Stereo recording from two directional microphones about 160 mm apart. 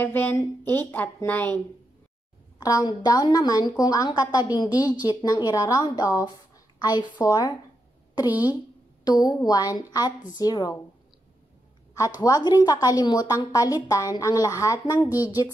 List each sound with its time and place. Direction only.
0.0 s a woman's voice: 10° left (ahead or behind)
2.6 s a woman's voice: 25° left (ahead or behind)
8.3 s a woman's voice: 10° right (ahead or behind)
9.0 s a woman's voice: 25° left (ahead or behind)
12.2 s a woman's voice: 25° left (ahead or behind)
15.0 s a woman's voice: 10° right (ahead or behind)